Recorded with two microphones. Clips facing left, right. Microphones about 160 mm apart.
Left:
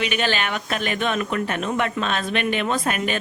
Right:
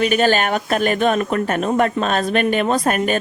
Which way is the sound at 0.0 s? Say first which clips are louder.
Right 7 dB; 40° right (ahead or behind).